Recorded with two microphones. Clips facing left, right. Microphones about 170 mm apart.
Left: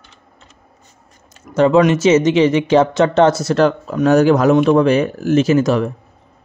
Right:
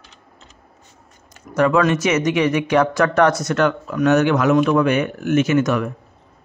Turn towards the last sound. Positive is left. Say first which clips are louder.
# left 3 dB
turn(degrees=30)  # may be behind; listen again after turning